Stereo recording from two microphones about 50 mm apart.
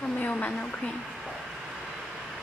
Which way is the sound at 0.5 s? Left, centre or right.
Centre.